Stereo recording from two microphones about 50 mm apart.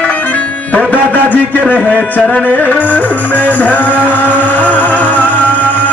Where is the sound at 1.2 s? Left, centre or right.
Left.